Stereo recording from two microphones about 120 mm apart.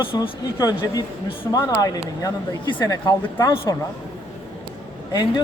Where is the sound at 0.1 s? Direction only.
35° left (ahead or behind).